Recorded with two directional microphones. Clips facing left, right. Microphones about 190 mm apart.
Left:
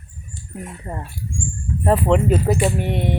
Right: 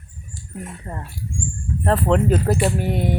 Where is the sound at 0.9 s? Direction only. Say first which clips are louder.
Left 2 dB; 15° left (ahead or behind).